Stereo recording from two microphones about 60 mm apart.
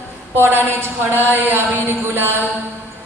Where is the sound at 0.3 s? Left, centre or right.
Right.